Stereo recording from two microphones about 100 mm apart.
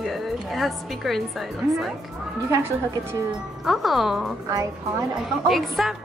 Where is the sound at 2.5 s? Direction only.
30° right (ahead or behind).